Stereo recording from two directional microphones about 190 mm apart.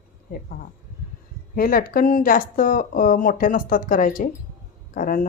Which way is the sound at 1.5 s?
50° left (ahead or behind).